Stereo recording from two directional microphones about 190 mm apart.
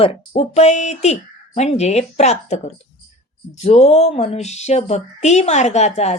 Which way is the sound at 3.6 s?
35° left (ahead or behind).